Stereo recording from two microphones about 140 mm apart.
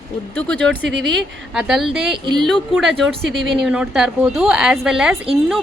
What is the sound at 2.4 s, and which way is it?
A woman's voice, centre (ahead or behind).